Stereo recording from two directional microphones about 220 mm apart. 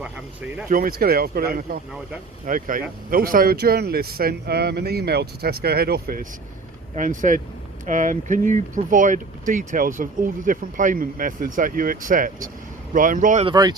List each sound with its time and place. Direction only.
0.0 s speech: 5° right (ahead or behind)
0.7 s a man's voice: 40° right (ahead or behind)
13.4 s speech: 20° right (ahead or behind)